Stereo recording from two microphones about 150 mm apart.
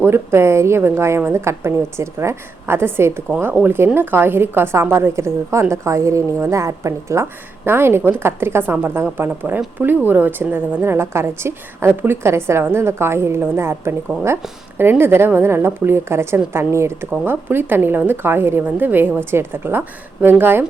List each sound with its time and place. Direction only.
0.0 s a woman's voice: 15° right (ahead or behind)